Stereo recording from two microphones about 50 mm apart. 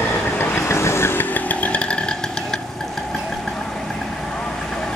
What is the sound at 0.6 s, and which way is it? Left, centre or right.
Vehicle, left.